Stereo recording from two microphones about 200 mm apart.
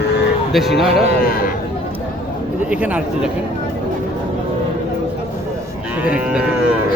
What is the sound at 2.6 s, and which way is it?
Speech, 5° right (ahead or behind).